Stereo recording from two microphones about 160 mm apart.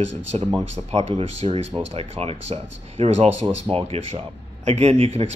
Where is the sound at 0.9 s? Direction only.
40° right (ahead or behind).